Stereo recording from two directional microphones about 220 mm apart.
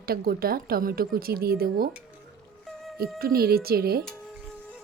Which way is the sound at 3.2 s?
45° right (ahead or behind).